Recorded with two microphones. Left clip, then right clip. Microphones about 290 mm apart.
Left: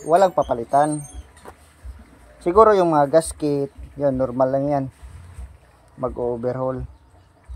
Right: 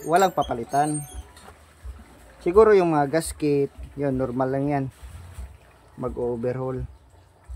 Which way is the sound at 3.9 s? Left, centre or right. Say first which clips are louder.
Left 6 dB; centre.